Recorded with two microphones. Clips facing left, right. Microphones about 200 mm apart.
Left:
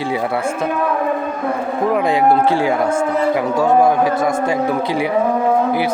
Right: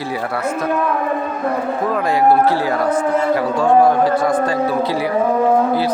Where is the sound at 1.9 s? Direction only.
15° left (ahead or behind).